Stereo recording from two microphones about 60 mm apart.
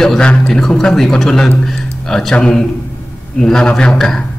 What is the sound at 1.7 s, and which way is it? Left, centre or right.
Music, centre.